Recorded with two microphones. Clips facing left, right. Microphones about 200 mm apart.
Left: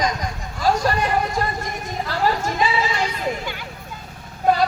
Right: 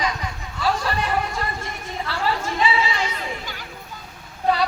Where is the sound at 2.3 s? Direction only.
40° left (ahead or behind).